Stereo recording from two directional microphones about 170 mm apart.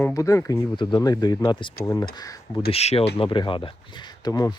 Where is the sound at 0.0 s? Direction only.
20° left (ahead or behind).